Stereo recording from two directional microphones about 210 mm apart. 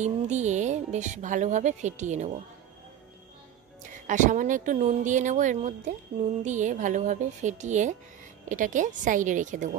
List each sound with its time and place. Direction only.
0.0 s speech: 35° right (ahead or behind)
4.1 s speech: 35° right (ahead or behind)